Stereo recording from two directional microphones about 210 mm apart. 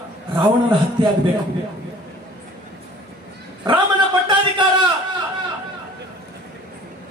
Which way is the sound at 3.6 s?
25° right (ahead or behind).